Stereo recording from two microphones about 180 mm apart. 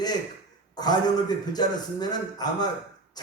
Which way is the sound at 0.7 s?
20° left (ahead or behind).